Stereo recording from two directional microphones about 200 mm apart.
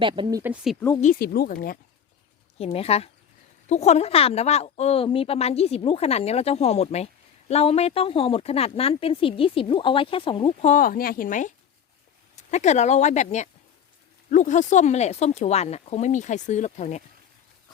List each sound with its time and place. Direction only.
0.0 s speech: 20° right (ahead or behind)
0.5 s speech: centre (ahead or behind)
1.0 s speech: 50° left (ahead or behind)
2.6 s a woman's voice: 30° left (ahead or behind)